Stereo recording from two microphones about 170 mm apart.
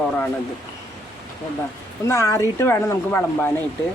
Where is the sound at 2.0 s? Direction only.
15° left (ahead or behind).